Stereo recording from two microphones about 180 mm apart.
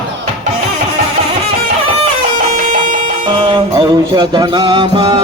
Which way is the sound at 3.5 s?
25° right (ahead or behind).